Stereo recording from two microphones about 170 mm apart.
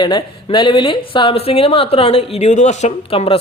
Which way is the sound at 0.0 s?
25° left (ahead or behind).